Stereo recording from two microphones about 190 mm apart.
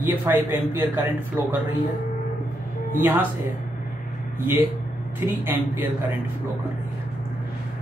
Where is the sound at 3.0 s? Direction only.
10° right (ahead or behind).